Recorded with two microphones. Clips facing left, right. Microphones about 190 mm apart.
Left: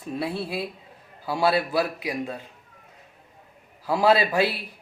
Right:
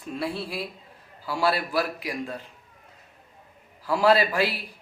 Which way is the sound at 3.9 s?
20° left (ahead or behind).